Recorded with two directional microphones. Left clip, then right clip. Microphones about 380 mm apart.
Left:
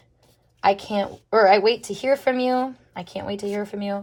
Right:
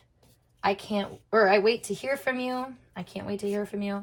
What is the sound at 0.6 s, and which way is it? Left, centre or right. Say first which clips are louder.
A woman's voice: left 7 dB; left.